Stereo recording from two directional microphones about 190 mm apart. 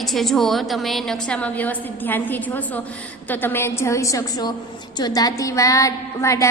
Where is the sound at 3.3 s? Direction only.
10° left (ahead or behind).